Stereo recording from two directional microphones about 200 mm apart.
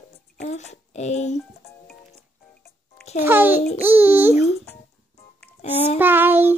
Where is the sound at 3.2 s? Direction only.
10° right (ahead or behind).